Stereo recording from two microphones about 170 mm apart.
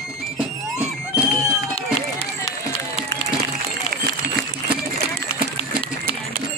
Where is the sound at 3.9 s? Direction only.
65° right (ahead or behind).